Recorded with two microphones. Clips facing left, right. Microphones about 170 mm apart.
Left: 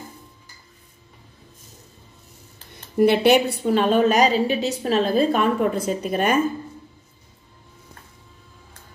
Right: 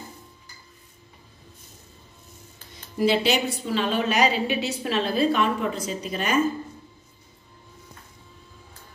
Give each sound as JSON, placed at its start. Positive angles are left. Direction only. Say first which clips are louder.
{"t": 2.7, "sound": "a woman's voice", "louder": "left 5 dB", "side_deg": 60}